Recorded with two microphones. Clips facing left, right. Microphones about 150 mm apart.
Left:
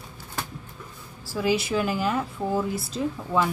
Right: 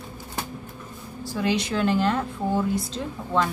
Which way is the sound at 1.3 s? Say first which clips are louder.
Left 1 dB; 5° left (ahead or behind).